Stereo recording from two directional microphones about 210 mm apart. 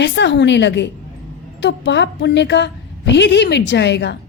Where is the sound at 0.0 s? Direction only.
55° left (ahead or behind).